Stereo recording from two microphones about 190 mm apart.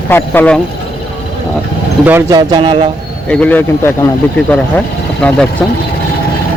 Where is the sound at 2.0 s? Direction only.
15° right (ahead or behind).